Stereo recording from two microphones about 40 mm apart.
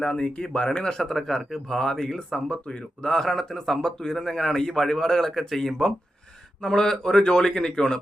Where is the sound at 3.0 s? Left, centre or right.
Centre.